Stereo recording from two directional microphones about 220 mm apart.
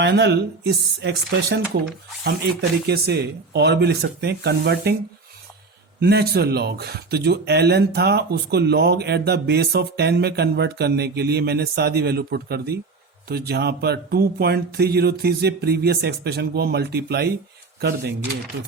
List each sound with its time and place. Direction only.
0.0 s speech: 50° right (ahead or behind)
6.0 s speech: 50° right (ahead or behind)